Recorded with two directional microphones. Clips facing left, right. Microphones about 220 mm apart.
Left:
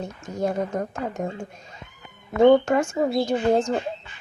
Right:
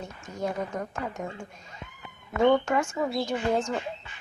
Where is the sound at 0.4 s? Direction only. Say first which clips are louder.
Left 6 dB; 35° left (ahead or behind).